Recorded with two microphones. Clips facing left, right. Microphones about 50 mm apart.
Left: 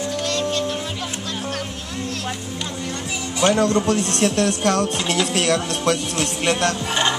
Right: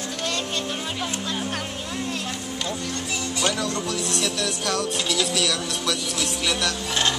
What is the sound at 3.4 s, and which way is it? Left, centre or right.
Speech, left.